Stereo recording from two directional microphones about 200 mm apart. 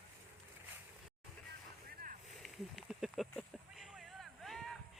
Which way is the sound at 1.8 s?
45° right (ahead or behind).